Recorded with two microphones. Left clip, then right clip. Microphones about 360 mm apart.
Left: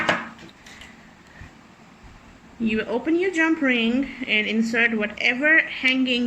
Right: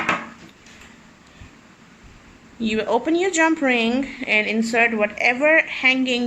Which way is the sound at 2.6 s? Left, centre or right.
Centre.